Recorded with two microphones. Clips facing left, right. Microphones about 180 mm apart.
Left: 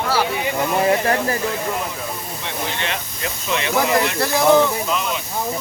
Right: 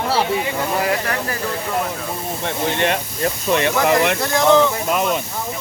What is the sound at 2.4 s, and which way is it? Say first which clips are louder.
Speech: right 7 dB; 50° right (ahead or behind).